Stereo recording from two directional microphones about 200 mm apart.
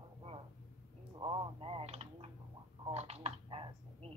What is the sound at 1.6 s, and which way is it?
Typing, 30° right (ahead or behind).